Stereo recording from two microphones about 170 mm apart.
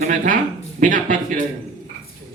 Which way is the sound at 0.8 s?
50° right (ahead or behind).